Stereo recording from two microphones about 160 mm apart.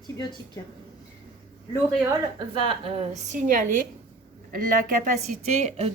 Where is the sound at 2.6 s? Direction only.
35° right (ahead or behind); by 3.8 s 55° right (ahead or behind).